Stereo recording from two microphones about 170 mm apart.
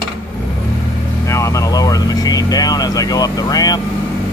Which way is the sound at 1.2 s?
20° left (ahead or behind).